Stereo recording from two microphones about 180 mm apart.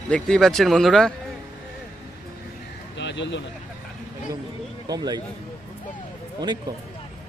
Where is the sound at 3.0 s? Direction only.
80° left.